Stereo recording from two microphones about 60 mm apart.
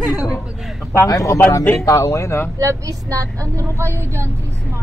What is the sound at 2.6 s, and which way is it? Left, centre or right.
A woman's voice, right.